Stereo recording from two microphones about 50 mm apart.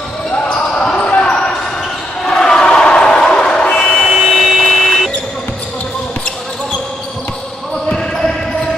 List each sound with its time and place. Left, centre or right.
0.6 s basketball bounce: centre
2.2 s crowd: centre
3.7 s vehicle: centre
4.1 s a sound: centre